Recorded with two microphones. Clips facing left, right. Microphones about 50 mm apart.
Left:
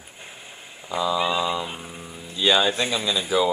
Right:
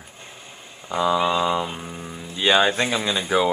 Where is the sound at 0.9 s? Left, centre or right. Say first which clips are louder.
Right 3 dB; right.